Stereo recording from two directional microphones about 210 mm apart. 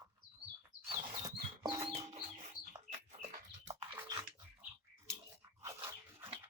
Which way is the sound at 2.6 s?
90° left.